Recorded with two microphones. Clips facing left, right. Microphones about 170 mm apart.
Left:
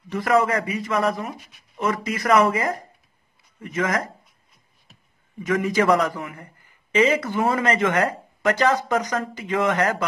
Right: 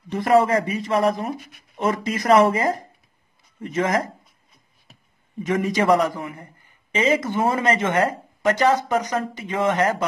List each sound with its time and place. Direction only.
0.1 s speech: 30° right (ahead or behind)
5.5 s speech: 25° right (ahead or behind)